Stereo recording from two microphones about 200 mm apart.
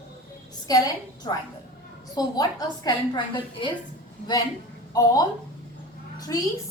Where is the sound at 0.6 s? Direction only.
20° left (ahead or behind).